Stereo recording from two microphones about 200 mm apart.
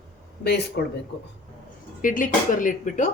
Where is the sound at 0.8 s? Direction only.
55° left (ahead or behind).